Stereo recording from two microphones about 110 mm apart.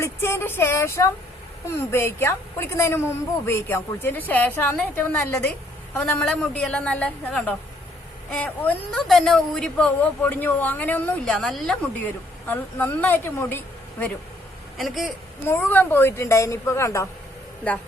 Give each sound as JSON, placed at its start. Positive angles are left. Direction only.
{"t": 0.0, "sound": "a woman's voice", "side_deg": 25}
{"t": 11.3, "sound": "a woman's voice", "side_deg": 5}
{"t": 12.5, "sound": "a woman's voice", "side_deg": 20}
{"t": 14.8, "sound": "a woman's voice", "side_deg": 0}
{"t": 15.4, "sound": "a woman's voice", "side_deg": 20}
{"t": 17.6, "sound": "a woman's voice", "side_deg": 15}